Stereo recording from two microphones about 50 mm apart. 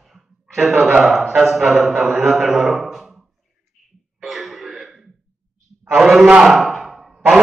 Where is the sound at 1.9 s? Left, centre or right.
Right.